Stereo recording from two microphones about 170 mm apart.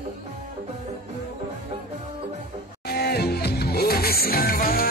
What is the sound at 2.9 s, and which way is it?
Music, 65° left (ahead or behind).